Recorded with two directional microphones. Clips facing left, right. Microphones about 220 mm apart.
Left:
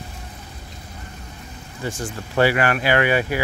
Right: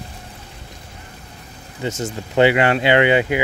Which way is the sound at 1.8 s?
20° right (ahead or behind).